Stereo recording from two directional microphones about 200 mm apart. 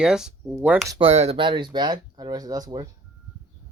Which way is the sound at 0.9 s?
30° right (ahead or behind).